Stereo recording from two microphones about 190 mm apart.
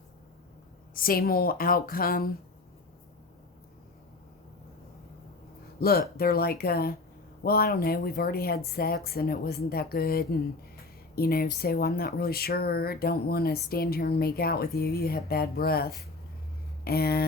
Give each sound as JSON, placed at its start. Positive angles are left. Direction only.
{"t": 0.9, "sound": "speech", "side_deg": 50}
{"t": 5.8, "sound": "speech", "side_deg": 50}